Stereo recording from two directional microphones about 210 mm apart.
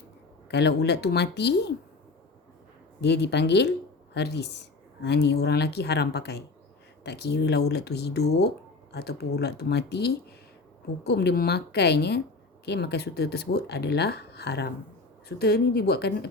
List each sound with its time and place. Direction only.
0.5 s speech: 50° left (ahead or behind)
3.0 s speech: 55° left (ahead or behind)